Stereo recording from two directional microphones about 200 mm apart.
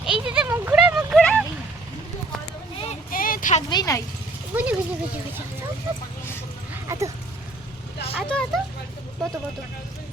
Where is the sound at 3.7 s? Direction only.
20° left (ahead or behind).